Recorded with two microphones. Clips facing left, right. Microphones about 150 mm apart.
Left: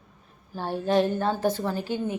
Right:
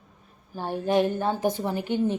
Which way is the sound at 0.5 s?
15° right (ahead or behind).